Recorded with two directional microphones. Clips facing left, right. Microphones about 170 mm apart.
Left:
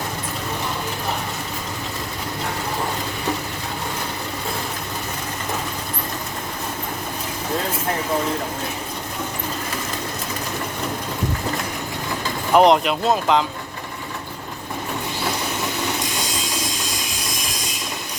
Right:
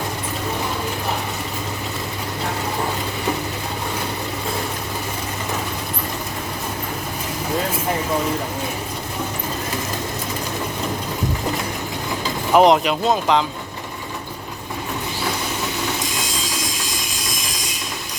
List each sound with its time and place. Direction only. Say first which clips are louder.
12.5 s speech: right 1 dB; centre (ahead or behind)